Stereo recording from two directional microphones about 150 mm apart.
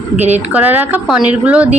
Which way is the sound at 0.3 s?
10° right (ahead or behind).